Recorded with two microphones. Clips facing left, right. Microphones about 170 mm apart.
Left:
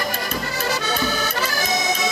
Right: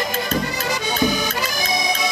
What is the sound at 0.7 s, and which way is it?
Accordion, 15° right (ahead or behind).